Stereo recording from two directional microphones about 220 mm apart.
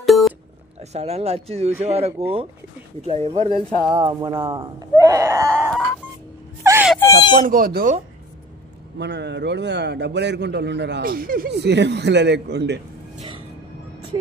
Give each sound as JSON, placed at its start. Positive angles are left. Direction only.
{"t": 0.0, "sound": "a sound", "side_deg": 0}
{"t": 0.7, "sound": "speech", "side_deg": -30}
{"t": 3.9, "sound": "speech", "side_deg": -15}
{"t": 6.6, "sound": "wail", "side_deg": -10}
{"t": 7.4, "sound": "speech", "side_deg": -40}
{"t": 8.9, "sound": "a man's voice", "side_deg": -50}